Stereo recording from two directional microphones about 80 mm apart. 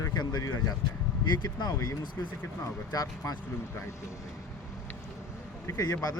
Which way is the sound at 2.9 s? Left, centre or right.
Left.